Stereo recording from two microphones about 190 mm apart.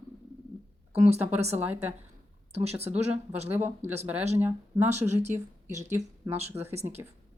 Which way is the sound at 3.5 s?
10° right (ahead or behind).